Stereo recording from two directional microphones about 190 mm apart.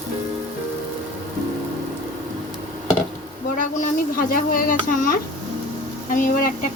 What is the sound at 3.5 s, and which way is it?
Speech, 45° left (ahead or behind).